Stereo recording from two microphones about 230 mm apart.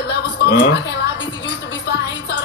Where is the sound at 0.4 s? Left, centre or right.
Left.